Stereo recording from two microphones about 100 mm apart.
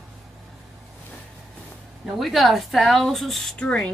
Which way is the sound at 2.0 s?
Centre (ahead or behind).